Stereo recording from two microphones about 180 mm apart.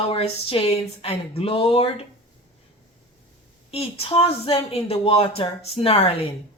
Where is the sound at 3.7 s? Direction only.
35° left (ahead or behind).